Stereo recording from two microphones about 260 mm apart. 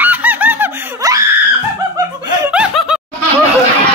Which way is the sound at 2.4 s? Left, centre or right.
Centre.